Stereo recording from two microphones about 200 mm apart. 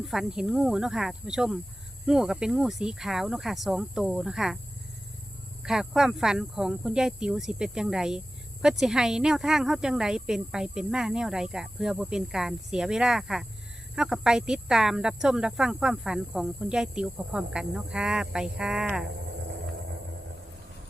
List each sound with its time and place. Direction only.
0.0 s speech: centre (ahead or behind)
5.6 s speech: centre (ahead or behind)